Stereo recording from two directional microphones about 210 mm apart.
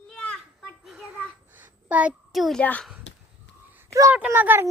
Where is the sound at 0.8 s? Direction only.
Centre (ahead or behind).